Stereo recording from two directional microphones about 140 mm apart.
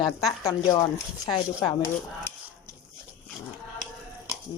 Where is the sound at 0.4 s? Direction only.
30° left (ahead or behind).